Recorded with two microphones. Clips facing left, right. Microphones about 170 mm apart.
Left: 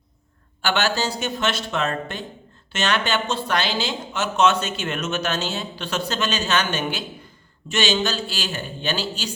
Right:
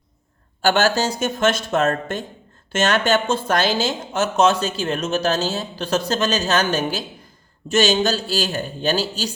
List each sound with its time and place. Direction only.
0.6 s speech: 45° right (ahead or behind)